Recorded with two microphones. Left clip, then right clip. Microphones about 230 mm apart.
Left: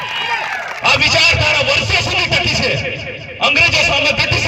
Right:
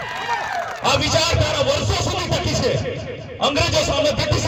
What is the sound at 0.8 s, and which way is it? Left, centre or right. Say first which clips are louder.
Speech: left 7 dB; right.